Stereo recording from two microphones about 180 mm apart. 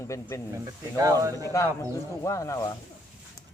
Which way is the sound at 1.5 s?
15° left (ahead or behind).